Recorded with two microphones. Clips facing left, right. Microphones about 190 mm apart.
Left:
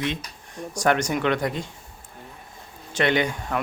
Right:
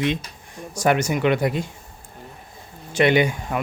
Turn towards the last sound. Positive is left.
turn(degrees=-10)  # may be behind; listen again after turning